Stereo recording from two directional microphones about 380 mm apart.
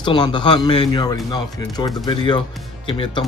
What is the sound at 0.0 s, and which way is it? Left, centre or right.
Speech, centre.